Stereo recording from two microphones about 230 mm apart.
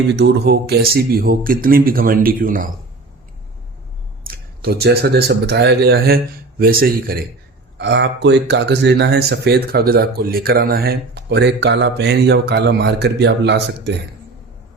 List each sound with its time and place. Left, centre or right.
0.1 s speech: right
4.3 s speech: right
7.8 s speech: right